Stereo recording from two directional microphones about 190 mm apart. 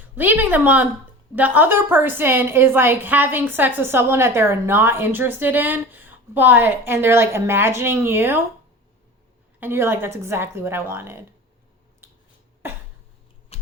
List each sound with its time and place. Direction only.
0.2 s a woman's voice: 10° right (ahead or behind)
9.6 s a woman's voice: 10° right (ahead or behind)
13.5 s typing: 30° left (ahead or behind)